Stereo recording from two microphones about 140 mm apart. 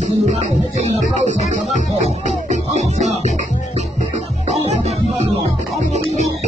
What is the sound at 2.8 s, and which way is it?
Music, 55° right (ahead or behind).